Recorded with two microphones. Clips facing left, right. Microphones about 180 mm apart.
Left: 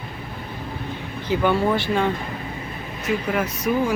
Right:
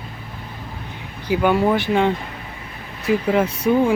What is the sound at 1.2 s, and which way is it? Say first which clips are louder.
Speech: right 3 dB; 10° right (ahead or behind).